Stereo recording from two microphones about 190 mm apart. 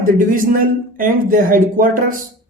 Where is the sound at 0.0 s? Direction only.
45° right (ahead or behind).